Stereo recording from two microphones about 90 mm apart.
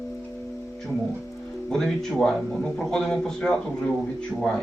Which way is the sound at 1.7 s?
5° left (ahead or behind).